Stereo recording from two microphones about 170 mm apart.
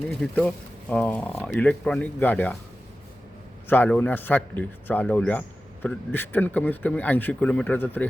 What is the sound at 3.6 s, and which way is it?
A man's voice, 10° left (ahead or behind).